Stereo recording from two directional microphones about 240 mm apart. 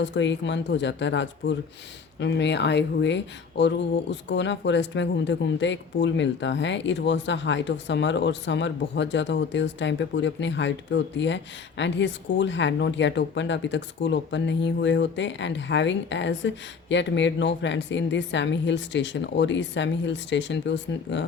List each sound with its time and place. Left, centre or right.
0.0 s speech: left